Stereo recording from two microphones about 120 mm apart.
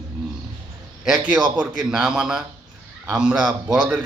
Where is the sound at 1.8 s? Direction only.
5° right (ahead or behind).